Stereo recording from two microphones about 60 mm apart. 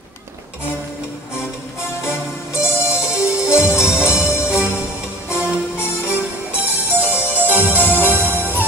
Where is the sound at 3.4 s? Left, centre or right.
Left.